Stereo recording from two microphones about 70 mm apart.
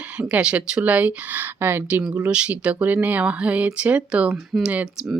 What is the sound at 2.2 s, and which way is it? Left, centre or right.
Speech, centre.